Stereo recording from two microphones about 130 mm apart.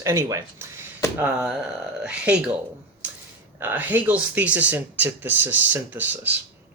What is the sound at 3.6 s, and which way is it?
Speech, 15° right (ahead or behind).